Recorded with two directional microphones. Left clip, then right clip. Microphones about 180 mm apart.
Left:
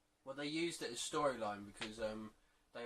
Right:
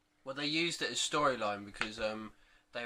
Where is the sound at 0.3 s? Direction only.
15° right (ahead or behind).